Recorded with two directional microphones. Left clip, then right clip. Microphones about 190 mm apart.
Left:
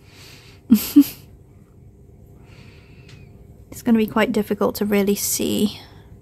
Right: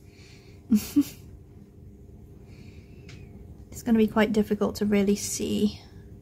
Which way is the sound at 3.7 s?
40° left (ahead or behind).